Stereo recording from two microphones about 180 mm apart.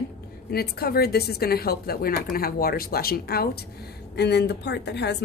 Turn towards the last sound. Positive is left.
turn(degrees=70)  # may be behind; listen again after turning